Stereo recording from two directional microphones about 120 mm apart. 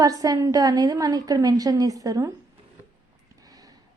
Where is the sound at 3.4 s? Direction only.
30° right (ahead or behind).